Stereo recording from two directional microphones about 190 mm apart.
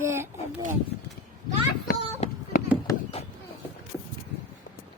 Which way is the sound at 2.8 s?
30° left (ahead or behind).